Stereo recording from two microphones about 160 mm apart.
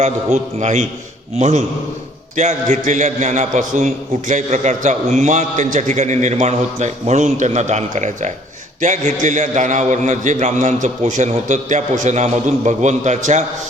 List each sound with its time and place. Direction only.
0.0 s a man's voice: 45° right (ahead or behind)